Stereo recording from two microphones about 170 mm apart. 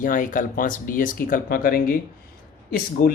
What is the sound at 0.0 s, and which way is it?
Speech, 50° left (ahead or behind).